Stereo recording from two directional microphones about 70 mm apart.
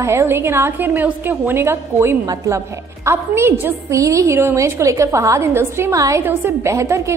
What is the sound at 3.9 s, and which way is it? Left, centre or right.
A woman's voice, right.